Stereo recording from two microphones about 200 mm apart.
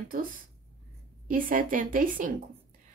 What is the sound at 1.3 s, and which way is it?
A woman's voice, 45° right (ahead or behind).